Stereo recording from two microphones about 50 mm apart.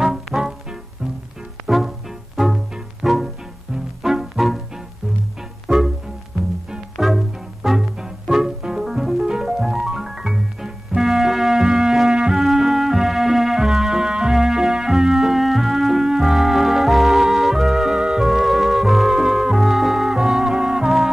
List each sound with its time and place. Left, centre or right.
0.0 s music: centre
1.7 s music: centre
5.7 s music: centre
7.0 s music: centre